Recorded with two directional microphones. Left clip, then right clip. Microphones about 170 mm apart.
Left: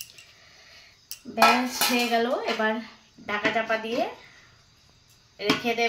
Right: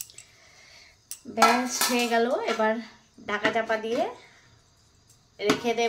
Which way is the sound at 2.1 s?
15° right (ahead or behind).